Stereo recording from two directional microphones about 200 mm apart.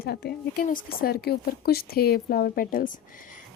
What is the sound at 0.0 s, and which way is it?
A woman's voice, 55° left (ahead or behind).